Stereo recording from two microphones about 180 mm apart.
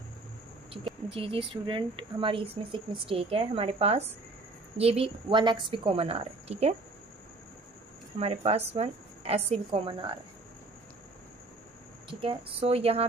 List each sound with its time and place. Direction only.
1.1 s speech: 30° right (ahead or behind)
8.2 s speech: 35° right (ahead or behind)
12.1 s speech: 30° right (ahead or behind)